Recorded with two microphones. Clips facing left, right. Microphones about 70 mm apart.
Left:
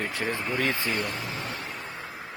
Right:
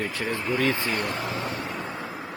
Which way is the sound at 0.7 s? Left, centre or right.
Right.